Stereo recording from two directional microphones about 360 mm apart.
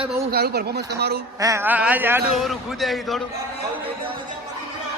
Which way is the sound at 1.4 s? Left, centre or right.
Centre.